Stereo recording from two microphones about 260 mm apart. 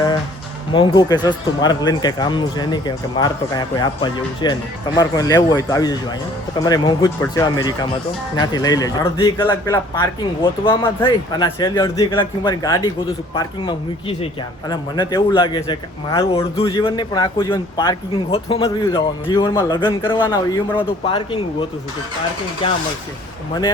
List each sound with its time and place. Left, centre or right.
0.7 s a man's voice: centre